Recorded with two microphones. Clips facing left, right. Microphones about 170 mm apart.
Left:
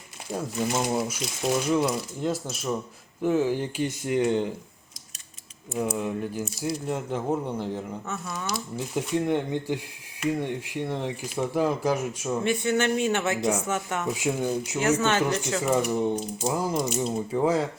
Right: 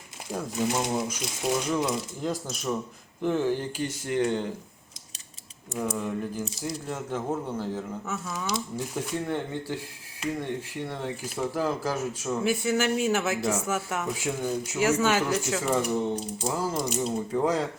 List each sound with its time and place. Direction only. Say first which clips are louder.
0.3 s speech: even; 5° left (ahead or behind)
6.0 s speech: left 2 dB; 10° left (ahead or behind)
8.0 s speech: even; 5° right (ahead or behind)
9.0 s speech: left 6 dB; 15° left (ahead or behind)
12.4 s speech: left 1 dB; 5° right (ahead or behind)
14.3 s speech: left 4 dB; 10° left (ahead or behind)
14.8 s speech: even; 10° right (ahead or behind)
15.6 s speech: left 5 dB; 5° left (ahead or behind)
16.8 s speech: left 1 dB; centre (ahead or behind)